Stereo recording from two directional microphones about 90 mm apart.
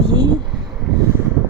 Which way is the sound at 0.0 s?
50° right (ahead or behind).